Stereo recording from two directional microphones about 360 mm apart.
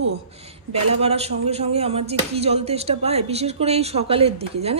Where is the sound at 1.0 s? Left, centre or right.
Centre.